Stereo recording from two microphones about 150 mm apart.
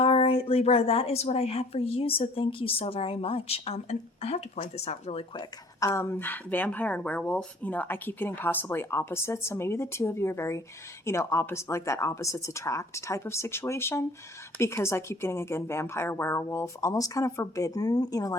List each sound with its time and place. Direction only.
0.0 s a woman's voice: 40° left (ahead or behind)
5.8 s speech: 15° left (ahead or behind)